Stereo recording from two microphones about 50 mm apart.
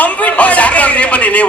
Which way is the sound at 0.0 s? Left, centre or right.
Left.